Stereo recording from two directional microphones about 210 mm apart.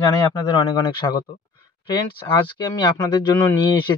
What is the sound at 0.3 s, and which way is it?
Speech, 20° left (ahead or behind).